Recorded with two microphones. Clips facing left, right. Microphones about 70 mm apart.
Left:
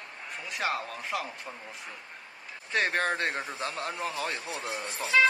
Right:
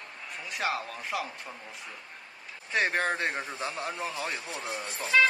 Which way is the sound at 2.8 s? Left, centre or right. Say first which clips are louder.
Even; centre.